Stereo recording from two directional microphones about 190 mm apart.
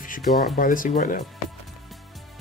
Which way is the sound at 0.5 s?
45° left (ahead or behind).